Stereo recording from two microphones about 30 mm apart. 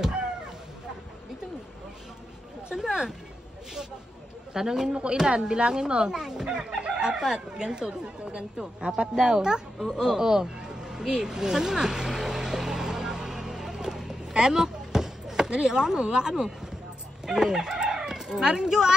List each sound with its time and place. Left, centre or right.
2.7 s speech: centre
4.6 s speech: right
5.3 s speech: right
9.9 s a sound: centre
14.3 s chop: right
15.5 s speech: right
17.3 s chicken: centre
18.5 s speech: right